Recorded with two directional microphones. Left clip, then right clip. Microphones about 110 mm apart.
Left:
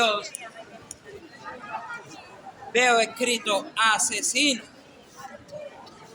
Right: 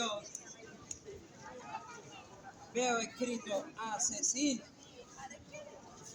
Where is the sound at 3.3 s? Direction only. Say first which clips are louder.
Left 14 dB; 30° left (ahead or behind).